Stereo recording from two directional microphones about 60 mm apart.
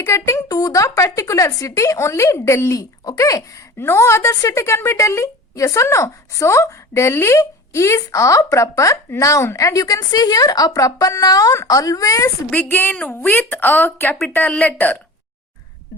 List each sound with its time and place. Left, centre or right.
0.0 s speech: left
2.7 s speech: left
3.8 s a woman's voice: left
12.5 s a woman's voice: left